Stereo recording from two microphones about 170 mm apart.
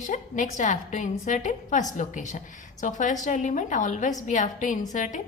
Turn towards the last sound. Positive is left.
turn(degrees=45)  # may be behind; listen again after turning